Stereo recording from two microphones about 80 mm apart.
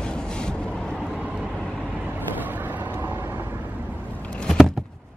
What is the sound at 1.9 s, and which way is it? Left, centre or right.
Vehicle, right.